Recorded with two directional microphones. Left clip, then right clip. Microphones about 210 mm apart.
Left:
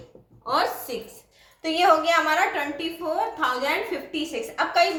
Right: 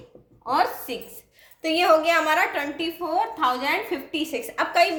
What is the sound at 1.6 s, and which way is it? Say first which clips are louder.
A woman's voice: right 1 dB; 55° right (ahead or behind).